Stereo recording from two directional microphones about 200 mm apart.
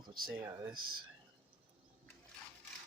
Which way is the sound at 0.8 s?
90° right.